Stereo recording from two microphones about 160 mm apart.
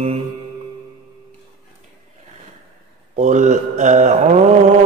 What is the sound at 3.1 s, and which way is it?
Mantra, 45° right (ahead or behind).